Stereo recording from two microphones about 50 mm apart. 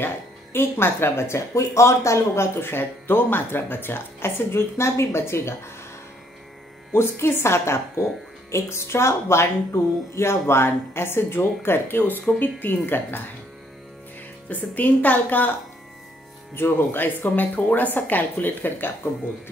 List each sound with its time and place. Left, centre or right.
0.0 s speech: left
6.9 s a woman's voice: left
14.5 s a woman's voice: left
16.5 s a woman's voice: left